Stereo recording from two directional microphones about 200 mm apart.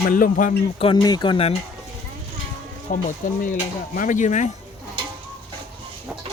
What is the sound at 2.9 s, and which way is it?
Speech, 40° left (ahead or behind).